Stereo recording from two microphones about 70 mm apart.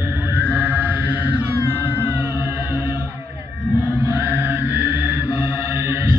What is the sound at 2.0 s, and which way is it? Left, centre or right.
Music, right.